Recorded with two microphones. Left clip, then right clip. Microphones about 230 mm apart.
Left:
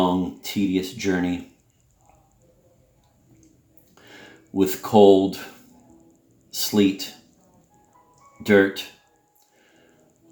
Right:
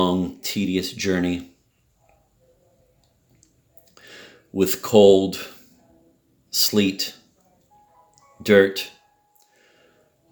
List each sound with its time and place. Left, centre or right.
0.0 s speech: right
4.0 s speech: right
6.5 s speech: right
8.1 s music: right